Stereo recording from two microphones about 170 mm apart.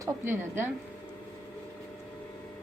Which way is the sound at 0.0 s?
15° right (ahead or behind).